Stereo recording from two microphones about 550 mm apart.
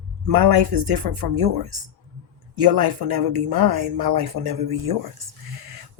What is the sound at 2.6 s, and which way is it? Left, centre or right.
Speech, right.